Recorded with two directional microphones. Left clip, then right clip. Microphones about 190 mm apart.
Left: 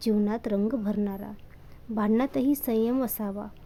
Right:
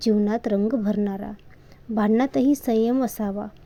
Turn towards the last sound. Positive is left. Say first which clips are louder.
# right 5 dB
turn(degrees=-15)  # may be behind; listen again after turning